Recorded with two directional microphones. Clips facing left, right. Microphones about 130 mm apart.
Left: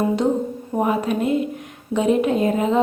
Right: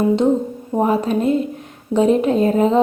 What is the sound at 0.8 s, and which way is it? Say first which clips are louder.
A woman's voice: right 3 dB; 35° right (ahead or behind).